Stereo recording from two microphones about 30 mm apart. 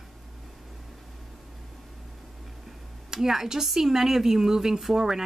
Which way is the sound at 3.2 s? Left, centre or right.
Centre.